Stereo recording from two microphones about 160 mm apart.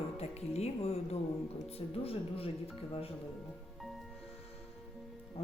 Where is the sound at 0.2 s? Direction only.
40° left (ahead or behind).